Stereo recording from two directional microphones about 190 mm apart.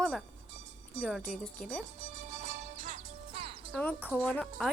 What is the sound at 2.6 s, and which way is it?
Music, 40° right (ahead or behind).